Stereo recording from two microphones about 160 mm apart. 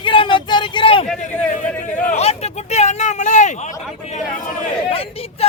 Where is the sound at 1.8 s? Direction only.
50° left (ahead or behind).